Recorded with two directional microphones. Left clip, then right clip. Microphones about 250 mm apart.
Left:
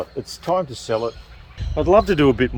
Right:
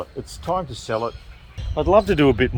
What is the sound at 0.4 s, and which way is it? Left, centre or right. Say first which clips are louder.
Speech: left 3 dB; centre.